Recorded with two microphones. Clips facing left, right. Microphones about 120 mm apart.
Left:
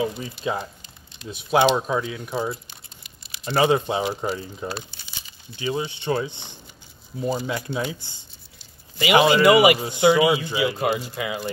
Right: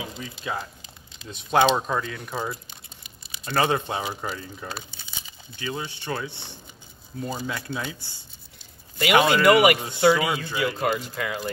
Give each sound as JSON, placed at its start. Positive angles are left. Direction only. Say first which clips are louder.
{"t": 0.0, "sound": "speech", "louder": "left 9 dB", "side_deg": 25}
{"t": 1.3, "sound": "speech", "louder": "left 1 dB", "side_deg": 10}
{"t": 9.0, "sound": "speech", "louder": "left 2 dB", "side_deg": 5}
{"t": 9.8, "sound": "speech", "louder": "left 3 dB", "side_deg": 15}